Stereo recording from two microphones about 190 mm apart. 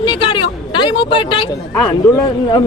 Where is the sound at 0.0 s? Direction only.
25° left (ahead or behind).